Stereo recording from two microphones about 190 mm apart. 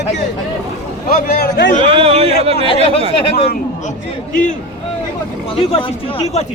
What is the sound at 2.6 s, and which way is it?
Speech, 30° left (ahead or behind).